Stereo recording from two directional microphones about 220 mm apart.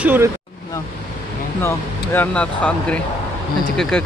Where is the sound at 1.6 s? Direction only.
10° left (ahead or behind).